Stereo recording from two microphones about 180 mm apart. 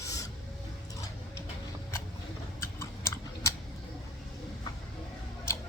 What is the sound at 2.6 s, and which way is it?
Tick, 15° left (ahead or behind).